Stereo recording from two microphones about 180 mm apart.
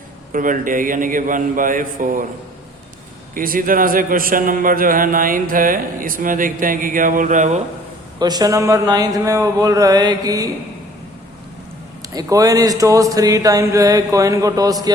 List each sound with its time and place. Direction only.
0.3 s a man's voice: 50° right (ahead or behind)
3.3 s a man's voice: 50° right (ahead or behind)
8.2 s speech: 20° right (ahead or behind)
12.1 s speech: 20° right (ahead or behind)